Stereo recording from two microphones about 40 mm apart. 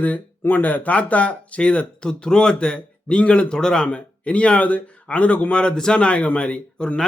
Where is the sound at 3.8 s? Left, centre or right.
Left.